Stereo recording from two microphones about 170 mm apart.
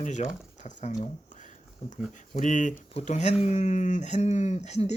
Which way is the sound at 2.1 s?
50° left (ahead or behind).